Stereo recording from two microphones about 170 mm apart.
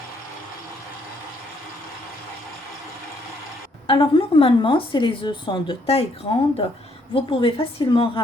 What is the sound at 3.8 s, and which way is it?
A woman's voice, 30° left (ahead or behind).